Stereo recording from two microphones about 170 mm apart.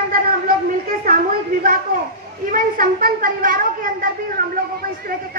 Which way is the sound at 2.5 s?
55° right (ahead or behind).